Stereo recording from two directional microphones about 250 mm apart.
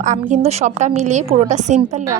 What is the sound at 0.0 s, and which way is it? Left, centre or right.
A woman's voice, right.